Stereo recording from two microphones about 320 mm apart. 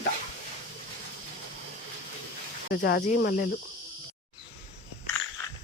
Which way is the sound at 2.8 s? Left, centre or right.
Left.